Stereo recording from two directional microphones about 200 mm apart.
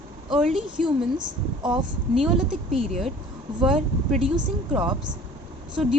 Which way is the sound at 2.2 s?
Centre (ahead or behind).